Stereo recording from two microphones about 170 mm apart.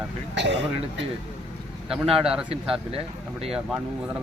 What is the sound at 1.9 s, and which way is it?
Speech, 5° right (ahead or behind).